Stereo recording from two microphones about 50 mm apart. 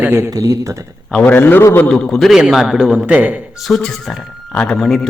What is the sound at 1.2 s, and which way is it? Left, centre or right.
Speech, left.